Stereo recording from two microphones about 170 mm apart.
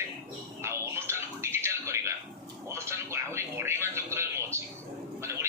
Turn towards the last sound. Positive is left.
turn(degrees=-15)  # may be behind; listen again after turning